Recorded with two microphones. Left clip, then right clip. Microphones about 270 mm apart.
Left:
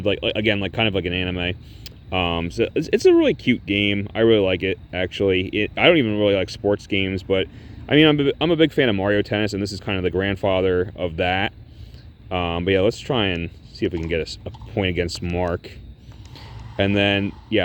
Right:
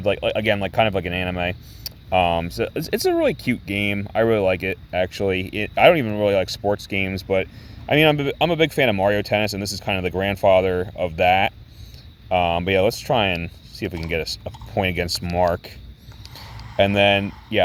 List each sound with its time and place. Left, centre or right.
0.1 s speech: right
16.7 s speech: right